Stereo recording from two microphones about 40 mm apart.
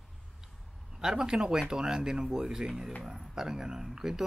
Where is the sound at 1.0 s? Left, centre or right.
Centre.